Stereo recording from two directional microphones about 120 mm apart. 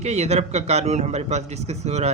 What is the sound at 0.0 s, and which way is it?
A man's voice, 65° right (ahead or behind).